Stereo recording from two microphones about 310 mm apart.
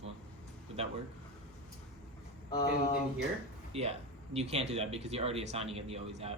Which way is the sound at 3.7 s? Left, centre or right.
Centre.